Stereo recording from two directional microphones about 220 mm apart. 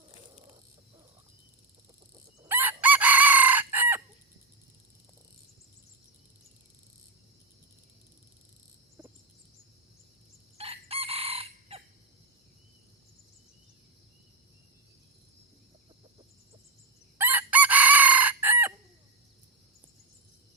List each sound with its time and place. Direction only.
2.4 s chicken: 10° right (ahead or behind)
10.6 s chicken: 25° right (ahead or behind)
17.2 s chicken: 10° right (ahead or behind)